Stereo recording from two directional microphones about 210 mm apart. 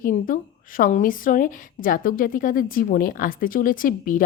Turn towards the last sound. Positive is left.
turn(degrees=40)  # may be behind; listen again after turning